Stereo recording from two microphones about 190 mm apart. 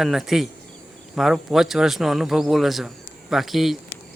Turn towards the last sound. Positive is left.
turn(degrees=0)  # may be behind; listen again after turning